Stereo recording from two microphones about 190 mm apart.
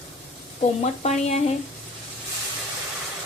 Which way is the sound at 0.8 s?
35° left (ahead or behind).